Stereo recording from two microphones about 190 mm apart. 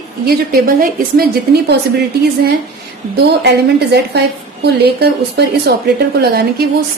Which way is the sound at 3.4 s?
60° right (ahead or behind).